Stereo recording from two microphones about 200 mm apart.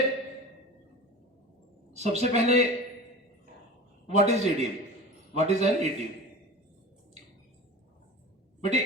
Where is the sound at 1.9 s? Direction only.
35° right (ahead or behind).